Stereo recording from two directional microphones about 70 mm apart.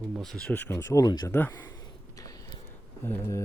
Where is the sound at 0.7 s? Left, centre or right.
Left.